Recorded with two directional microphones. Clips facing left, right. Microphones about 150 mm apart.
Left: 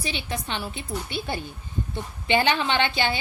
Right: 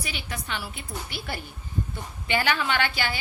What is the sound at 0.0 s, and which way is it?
A woman's voice, 25° left (ahead or behind).